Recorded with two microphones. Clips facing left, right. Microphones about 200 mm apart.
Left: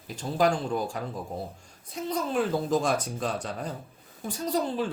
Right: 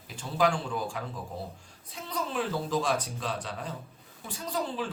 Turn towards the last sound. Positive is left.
turn(degrees=40)  # may be behind; listen again after turning